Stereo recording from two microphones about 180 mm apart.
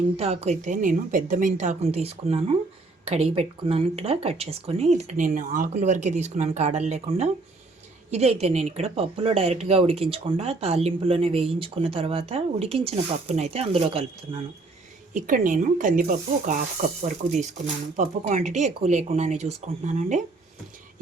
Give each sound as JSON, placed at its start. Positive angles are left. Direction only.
{"t": 0.2, "sound": "speech", "side_deg": -35}
{"t": 15.1, "sound": "speech", "side_deg": -45}
{"t": 17.0, "sound": "speech", "side_deg": -40}